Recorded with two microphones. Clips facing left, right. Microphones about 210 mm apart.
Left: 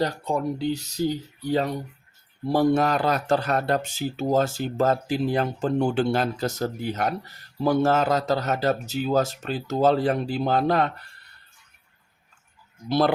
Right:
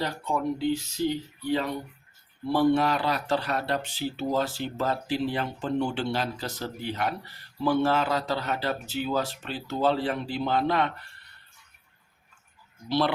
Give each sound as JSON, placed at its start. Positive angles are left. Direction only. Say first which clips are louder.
{"t": 0.0, "sound": "speech", "louder": "left 4 dB", "side_deg": 40}
{"t": 12.9, "sound": "speech", "louder": "left 4 dB", "side_deg": 45}